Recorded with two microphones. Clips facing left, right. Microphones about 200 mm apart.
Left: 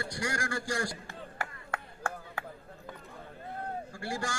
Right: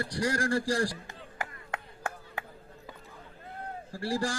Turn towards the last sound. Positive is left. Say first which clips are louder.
# right 5 dB
turn(degrees=-35)  # may be behind; listen again after turning